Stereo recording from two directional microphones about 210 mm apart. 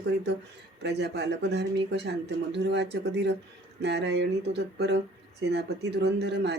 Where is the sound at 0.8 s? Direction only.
55° right (ahead or behind).